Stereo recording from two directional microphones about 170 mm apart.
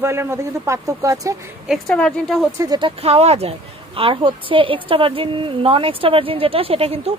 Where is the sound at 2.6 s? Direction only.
25° right (ahead or behind).